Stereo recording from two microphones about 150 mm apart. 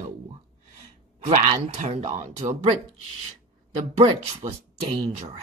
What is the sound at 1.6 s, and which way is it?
Speech, 50° right (ahead or behind).